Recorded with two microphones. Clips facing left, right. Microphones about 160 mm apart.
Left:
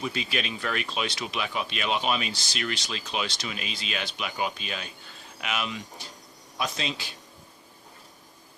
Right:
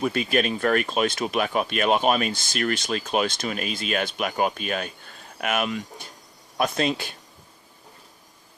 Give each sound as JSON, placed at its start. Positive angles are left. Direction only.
{"t": 0.0, "sound": "speech", "side_deg": -50}